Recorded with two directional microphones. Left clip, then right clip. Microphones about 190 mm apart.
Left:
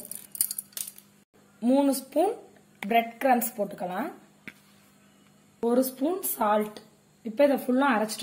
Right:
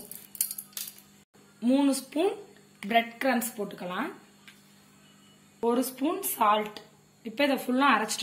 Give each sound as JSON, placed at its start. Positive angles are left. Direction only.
{"t": 1.6, "sound": "speech", "side_deg": 35}
{"t": 5.7, "sound": "speech", "side_deg": 60}
{"t": 7.2, "sound": "a woman's voice", "side_deg": 45}